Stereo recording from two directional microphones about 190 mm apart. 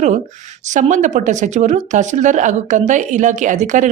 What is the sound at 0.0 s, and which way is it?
Speech, 40° right (ahead or behind).